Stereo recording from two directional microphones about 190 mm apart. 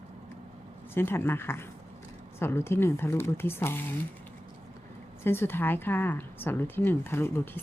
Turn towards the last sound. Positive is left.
turn(degrees=10)  # may be behind; listen again after turning